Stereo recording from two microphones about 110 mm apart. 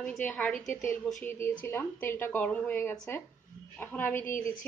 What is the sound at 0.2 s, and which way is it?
A woman's voice, 10° left (ahead or behind).